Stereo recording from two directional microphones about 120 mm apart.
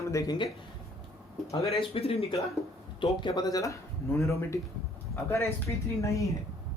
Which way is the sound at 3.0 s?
35° left (ahead or behind).